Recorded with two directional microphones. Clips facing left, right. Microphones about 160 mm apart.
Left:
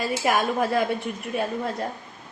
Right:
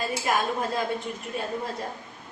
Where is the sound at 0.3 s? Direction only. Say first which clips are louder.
Left 4 dB; 70° left (ahead or behind).